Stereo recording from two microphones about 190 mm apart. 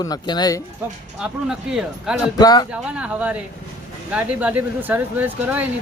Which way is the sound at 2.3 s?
20° left (ahead or behind).